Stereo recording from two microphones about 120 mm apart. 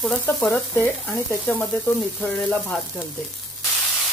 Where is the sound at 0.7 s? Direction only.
20° left (ahead or behind).